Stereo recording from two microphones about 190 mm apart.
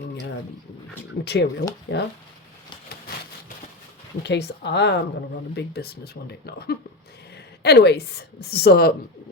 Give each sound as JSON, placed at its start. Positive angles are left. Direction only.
{"t": 1.2, "sound": "speech", "side_deg": 60}
{"t": 4.2, "sound": "speech", "side_deg": 60}
{"t": 5.5, "sound": "a woman's voice", "side_deg": 55}